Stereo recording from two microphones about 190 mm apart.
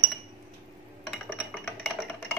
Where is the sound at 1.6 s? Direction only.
5° left (ahead or behind).